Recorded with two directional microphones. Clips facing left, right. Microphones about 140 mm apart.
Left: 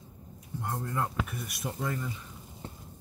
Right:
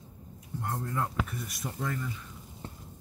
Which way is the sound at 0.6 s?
Centre (ahead or behind).